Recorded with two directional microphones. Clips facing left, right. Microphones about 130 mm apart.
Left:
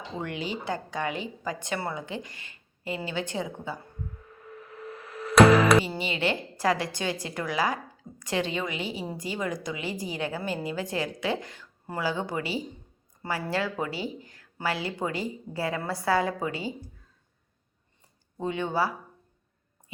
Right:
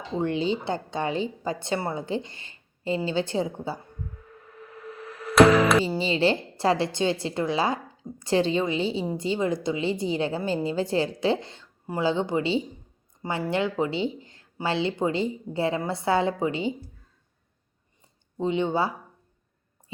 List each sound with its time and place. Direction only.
0.2 s a woman's voice: 30° right (ahead or behind)
5.4 s music: centre (ahead or behind)
5.8 s a woman's voice: 30° right (ahead or behind)
18.3 s a woman's voice: 20° right (ahead or behind)